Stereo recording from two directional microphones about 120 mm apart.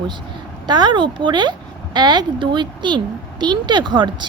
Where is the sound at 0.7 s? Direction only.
40° right (ahead or behind).